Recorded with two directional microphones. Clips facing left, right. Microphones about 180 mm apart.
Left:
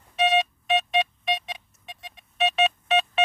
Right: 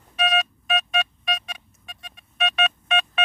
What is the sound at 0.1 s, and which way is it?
Music, 25° left (ahead or behind).